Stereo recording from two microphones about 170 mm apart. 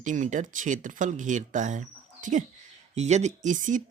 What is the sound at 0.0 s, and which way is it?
Speech, 45° right (ahead or behind).